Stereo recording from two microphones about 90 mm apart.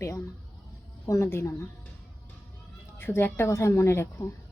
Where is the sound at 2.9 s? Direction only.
25° left (ahead or behind).